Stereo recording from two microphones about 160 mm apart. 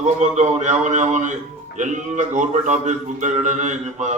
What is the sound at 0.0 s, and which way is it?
A man's voice, 45° right (ahead or behind).